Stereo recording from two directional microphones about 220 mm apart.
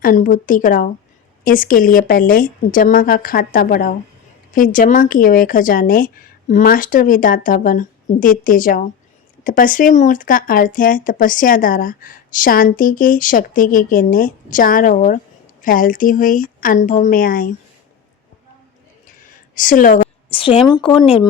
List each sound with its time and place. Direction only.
0.0 s speech: 35° left (ahead or behind)
19.2 s a sound: 35° left (ahead or behind)
20.3 s speech: 25° left (ahead or behind)